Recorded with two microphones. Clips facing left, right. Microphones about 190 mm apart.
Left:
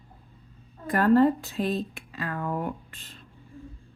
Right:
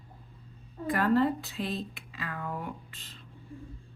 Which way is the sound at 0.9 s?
45° left (ahead or behind).